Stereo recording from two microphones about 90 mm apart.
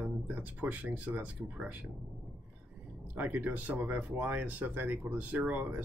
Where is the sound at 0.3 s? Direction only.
20° right (ahead or behind).